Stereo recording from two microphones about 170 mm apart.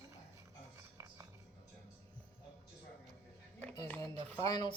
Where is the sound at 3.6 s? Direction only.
10° left (ahead or behind).